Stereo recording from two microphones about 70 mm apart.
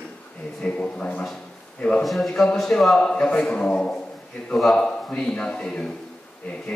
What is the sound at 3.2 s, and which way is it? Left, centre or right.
A man's voice, centre.